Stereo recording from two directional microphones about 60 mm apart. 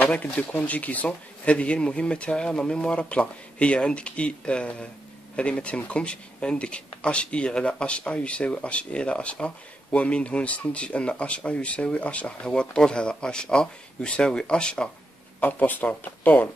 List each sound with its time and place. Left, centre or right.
0.1 s speech: centre
15.4 s speech: left